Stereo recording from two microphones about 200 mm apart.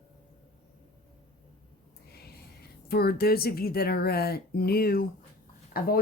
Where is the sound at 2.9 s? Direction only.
50° left (ahead or behind).